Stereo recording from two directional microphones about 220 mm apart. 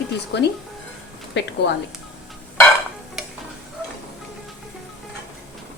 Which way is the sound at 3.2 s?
Centre (ahead or behind).